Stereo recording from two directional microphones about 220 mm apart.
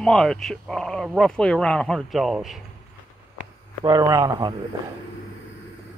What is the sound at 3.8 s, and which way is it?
Speech, 15° right (ahead or behind).